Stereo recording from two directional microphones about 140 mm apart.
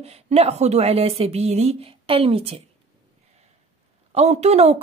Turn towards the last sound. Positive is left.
turn(degrees=-50)  # may be behind; listen again after turning